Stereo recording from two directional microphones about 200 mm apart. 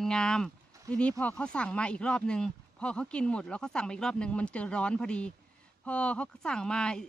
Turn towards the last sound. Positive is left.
turn(degrees=5)  # may be behind; listen again after turning